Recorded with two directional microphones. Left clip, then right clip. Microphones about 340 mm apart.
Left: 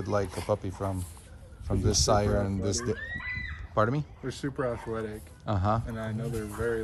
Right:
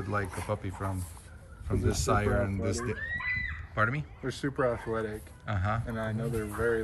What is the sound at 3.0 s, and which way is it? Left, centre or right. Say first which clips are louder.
Speech: right 3 dB; left.